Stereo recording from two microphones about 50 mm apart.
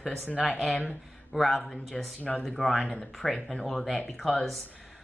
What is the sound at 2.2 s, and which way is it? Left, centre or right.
Speech, left.